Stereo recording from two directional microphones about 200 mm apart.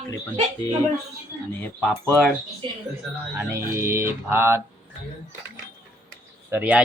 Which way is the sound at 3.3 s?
10° right (ahead or behind).